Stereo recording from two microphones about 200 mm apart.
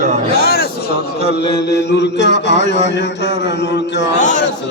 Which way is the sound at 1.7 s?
60° left (ahead or behind).